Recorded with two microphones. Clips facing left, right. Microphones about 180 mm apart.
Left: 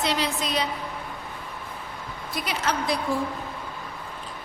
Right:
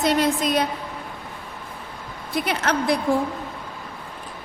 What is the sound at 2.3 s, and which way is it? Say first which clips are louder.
Speech: right 5 dB; 55° right (ahead or behind).